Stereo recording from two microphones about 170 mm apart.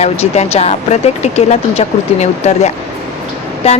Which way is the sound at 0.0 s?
40° left (ahead or behind).